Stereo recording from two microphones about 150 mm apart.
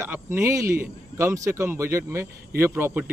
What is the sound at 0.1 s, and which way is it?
Speech, 15° right (ahead or behind).